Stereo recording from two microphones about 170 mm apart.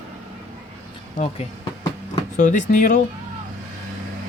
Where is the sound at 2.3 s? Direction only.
45° left (ahead or behind).